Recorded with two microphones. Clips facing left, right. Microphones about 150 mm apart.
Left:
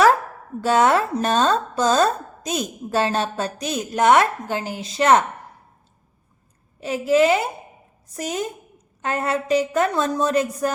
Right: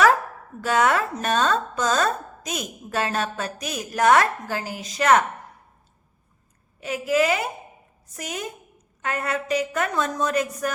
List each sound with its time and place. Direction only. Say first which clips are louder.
0.6 s speech: left 4 dB; 30° left (ahead or behind)
6.7 s a woman's voice: left 4 dB; 30° left (ahead or behind)